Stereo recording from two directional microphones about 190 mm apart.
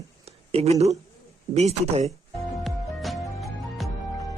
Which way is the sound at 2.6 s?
Centre (ahead or behind).